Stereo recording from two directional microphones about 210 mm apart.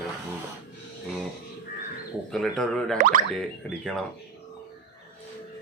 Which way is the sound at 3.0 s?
40° right (ahead or behind).